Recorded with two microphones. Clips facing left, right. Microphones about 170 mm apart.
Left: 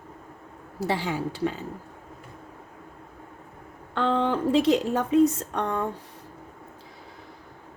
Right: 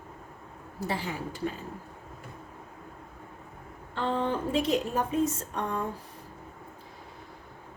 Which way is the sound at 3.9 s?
80° left.